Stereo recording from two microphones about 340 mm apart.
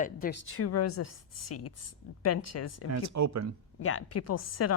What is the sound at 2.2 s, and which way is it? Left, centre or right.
Speech, left.